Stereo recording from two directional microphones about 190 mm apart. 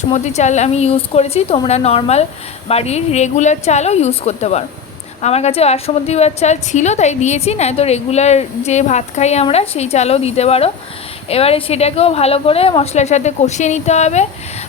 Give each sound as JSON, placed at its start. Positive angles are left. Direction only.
{"t": 0.1, "sound": "a woman's voice", "side_deg": 35}